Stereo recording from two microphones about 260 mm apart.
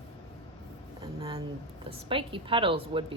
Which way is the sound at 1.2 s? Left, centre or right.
Centre.